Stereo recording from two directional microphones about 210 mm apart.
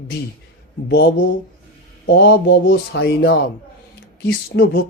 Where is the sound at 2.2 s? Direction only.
55° left (ahead or behind).